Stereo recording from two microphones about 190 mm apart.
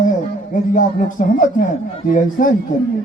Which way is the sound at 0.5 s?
45° left (ahead or behind).